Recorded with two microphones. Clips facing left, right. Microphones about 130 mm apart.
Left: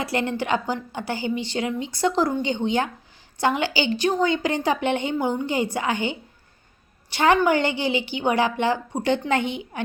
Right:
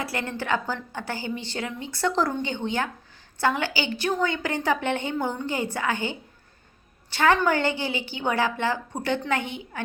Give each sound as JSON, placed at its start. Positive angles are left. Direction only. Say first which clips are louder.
{"t": 0.0, "sound": "a woman's voice", "louder": "left 5 dB", "side_deg": 20}